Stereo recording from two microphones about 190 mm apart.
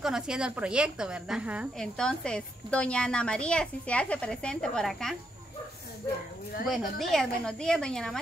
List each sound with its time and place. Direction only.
0.0 s a woman's voice: 5° right (ahead or behind)
2.0 s a woman's voice: 5° left (ahead or behind)
7.0 s a woman's voice: centre (ahead or behind)